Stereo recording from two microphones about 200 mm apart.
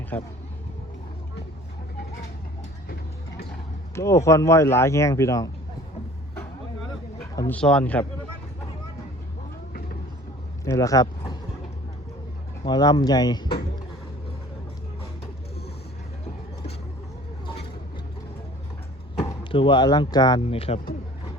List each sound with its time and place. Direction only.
0.1 s speech: 10° left (ahead or behind)
3.9 s speech: 15° left (ahead or behind)
7.3 s speech: 10° left (ahead or behind)
10.7 s speech: 15° left (ahead or behind)
12.6 s speech: 20° left (ahead or behind)
19.5 s speech: 25° left (ahead or behind)